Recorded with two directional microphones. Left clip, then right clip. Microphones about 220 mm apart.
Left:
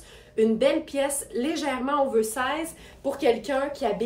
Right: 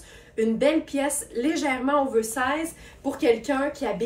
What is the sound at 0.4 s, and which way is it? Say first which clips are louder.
A woman's voice: even; 20° left (ahead or behind).